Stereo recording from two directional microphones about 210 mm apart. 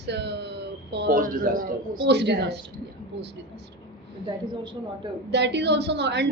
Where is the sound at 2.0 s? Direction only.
55° right (ahead or behind).